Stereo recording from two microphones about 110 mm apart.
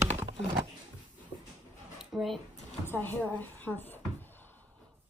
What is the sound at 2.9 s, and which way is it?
Music, 20° left (ahead or behind).